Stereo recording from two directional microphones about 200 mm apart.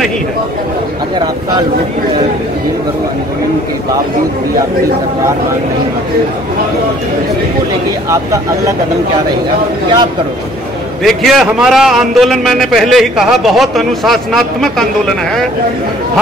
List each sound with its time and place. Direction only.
8.1 s speech: 15° right (ahead or behind)
11.1 s a man's voice: centre (ahead or behind)